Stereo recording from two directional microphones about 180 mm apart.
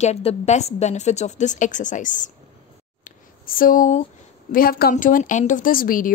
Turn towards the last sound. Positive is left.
turn(degrees=50)  # may be behind; listen again after turning